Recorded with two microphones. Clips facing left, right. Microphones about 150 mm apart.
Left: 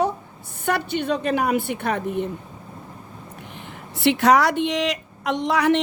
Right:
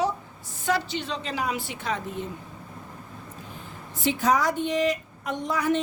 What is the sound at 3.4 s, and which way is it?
A woman's voice, 75° left (ahead or behind).